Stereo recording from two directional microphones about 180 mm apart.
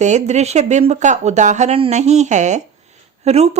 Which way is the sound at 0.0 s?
40° right (ahead or behind).